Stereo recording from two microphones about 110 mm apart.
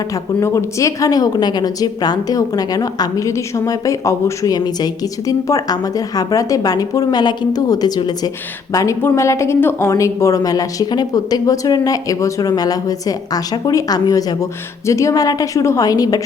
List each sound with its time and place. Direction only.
0.1 s a woman's voice: 30° left (ahead or behind)